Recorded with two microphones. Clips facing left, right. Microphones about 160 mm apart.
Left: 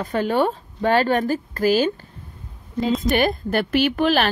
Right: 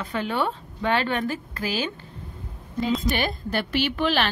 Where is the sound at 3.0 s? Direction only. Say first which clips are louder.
Left 6 dB; 50° left (ahead or behind).